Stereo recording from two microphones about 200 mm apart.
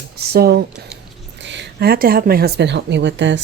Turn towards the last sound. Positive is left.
turn(degrees=-65)  # may be behind; listen again after turning